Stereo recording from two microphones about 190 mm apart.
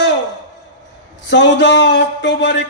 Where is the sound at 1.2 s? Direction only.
70° left (ahead or behind).